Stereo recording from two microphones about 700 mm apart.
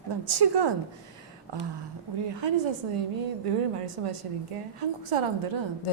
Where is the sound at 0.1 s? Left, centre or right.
Right.